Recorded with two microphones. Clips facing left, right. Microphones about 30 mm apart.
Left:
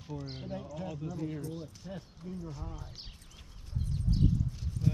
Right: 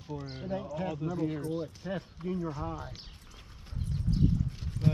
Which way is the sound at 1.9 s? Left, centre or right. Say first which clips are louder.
Right 8 dB; right.